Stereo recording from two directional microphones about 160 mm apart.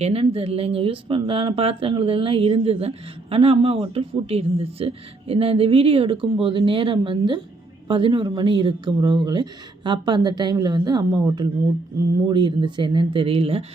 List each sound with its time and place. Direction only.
0.0 s speech: 40° right (ahead or behind)